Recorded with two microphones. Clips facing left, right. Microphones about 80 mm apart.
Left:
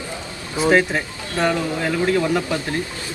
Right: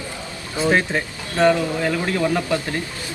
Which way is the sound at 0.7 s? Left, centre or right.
Centre.